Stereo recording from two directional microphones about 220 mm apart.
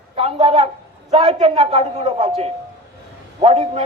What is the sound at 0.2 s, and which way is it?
A man's voice, 25° right (ahead or behind).